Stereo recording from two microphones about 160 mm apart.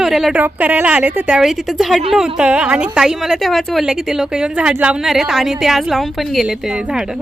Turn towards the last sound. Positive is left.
turn(degrees=-5)  # may be behind; listen again after turning